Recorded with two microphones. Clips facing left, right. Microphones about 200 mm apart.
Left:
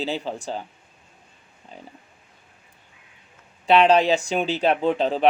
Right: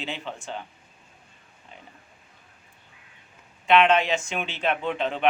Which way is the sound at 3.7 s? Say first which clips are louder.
Left 3 dB; 35° left (ahead or behind).